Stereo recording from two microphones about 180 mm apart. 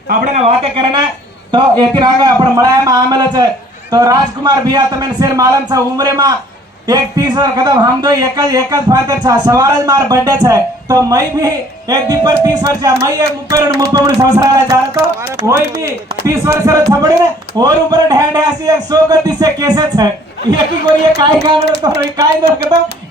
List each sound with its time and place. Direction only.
0.3 s a man's voice: 35° right (ahead or behind)
21.2 s a man's voice: 25° right (ahead or behind)